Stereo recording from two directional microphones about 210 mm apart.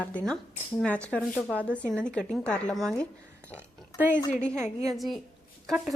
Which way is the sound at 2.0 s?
5° left (ahead or behind).